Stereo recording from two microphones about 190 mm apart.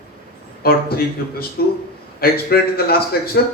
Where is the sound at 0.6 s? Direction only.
55° left (ahead or behind).